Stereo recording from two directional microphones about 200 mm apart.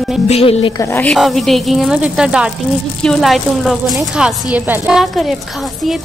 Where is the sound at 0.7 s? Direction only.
15° left (ahead or behind).